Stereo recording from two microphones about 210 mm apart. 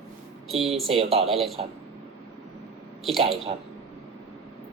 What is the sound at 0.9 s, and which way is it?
Speech, 25° right (ahead or behind).